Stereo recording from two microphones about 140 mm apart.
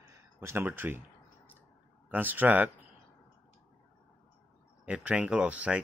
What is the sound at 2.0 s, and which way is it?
Speech, 15° right (ahead or behind).